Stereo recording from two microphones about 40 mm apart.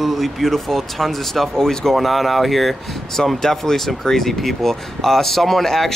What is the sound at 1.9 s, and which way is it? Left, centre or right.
Speech, centre.